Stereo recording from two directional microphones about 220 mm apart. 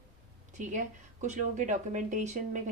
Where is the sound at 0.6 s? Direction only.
35° right (ahead or behind).